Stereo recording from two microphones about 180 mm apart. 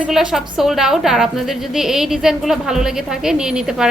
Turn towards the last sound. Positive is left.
turn(degrees=-5)  # may be behind; listen again after turning